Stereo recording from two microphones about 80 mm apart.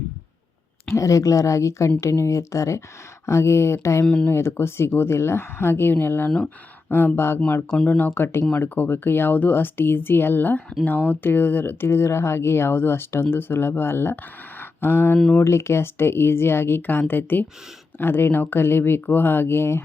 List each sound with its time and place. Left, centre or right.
0.9 s speech: left
4.0 s speech: centre
4.3 s speech: left
6.3 s speech: centre
6.9 s speech: left
14.6 s a sound: left
15.4 s speech: left